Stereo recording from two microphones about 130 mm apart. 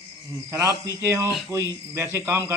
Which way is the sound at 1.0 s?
20° right (ahead or behind).